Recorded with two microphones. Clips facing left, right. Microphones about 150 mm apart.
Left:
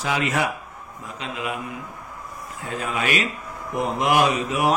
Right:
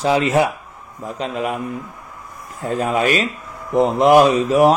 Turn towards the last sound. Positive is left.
turn(degrees=-35)  # may be behind; listen again after turning